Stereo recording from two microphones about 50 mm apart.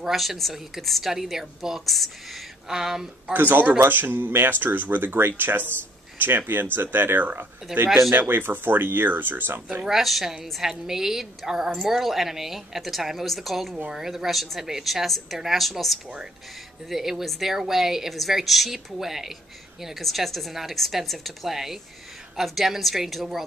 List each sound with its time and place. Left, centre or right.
0.0 s a woman's voice: centre
2.7 s a woman's voice: centre
3.3 s speech: right
9.8 s a woman's voice: centre